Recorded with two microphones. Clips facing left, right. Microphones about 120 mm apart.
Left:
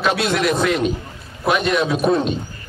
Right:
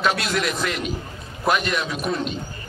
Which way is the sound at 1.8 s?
30° left (ahead or behind).